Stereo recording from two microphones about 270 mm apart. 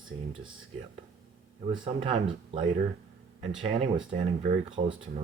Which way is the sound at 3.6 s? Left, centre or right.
Right.